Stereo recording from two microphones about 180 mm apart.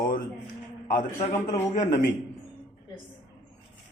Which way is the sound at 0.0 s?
50° left (ahead or behind).